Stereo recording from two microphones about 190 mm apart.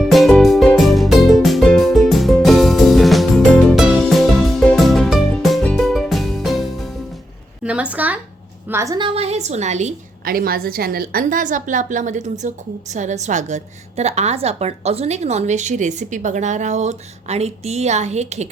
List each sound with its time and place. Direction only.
0.0 s music: centre (ahead or behind)
7.6 s a sound: 5° right (ahead or behind)
8.7 s a woman's voice: 15° right (ahead or behind); by 18.4 s 35° right (ahead or behind)